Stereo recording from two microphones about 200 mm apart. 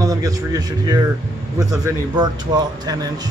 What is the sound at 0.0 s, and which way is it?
A man's voice, 20° right (ahead or behind).